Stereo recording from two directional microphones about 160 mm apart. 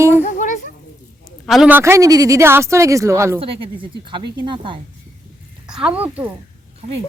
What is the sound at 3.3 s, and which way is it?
A woman's voice, 35° right (ahead or behind).